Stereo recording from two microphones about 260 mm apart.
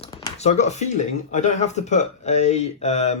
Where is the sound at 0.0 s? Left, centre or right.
Left.